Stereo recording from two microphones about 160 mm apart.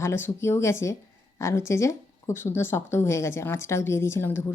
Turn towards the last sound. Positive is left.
turn(degrees=15)  # may be behind; listen again after turning